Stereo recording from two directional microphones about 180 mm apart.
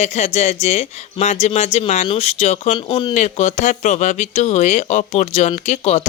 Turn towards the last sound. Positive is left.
turn(degrees=35)  # may be behind; listen again after turning